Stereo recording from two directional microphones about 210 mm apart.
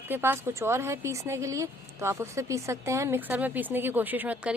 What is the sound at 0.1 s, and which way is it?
Speech, 10° right (ahead or behind).